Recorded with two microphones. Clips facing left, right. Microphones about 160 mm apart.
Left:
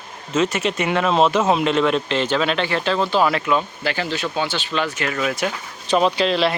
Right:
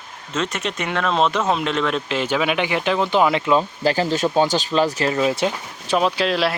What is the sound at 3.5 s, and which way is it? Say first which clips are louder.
Speech: right 4 dB; 35° right (ahead or behind).